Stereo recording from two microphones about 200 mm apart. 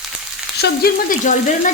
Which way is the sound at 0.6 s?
45° left (ahead or behind).